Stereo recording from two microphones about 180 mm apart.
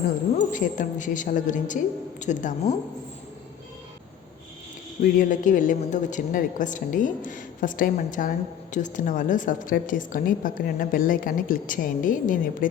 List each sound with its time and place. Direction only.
0.3 s a woman's voice: 45° left (ahead or behind)
5.3 s a woman's voice: 45° left (ahead or behind)